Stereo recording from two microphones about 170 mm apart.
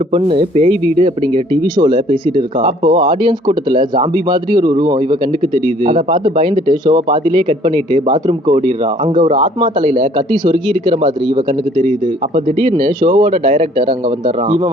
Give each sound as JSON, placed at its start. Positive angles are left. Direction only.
{"t": 0.1, "sound": "speech", "side_deg": -30}
{"t": 11.3, "sound": "a man's voice", "side_deg": -50}
{"t": 12.5, "sound": "speech", "side_deg": -30}
{"t": 13.5, "sound": "a man's voice", "side_deg": -55}
{"t": 13.8, "sound": "speech", "side_deg": -30}